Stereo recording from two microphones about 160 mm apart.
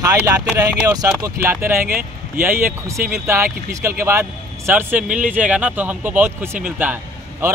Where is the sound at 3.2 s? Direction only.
15° right (ahead or behind).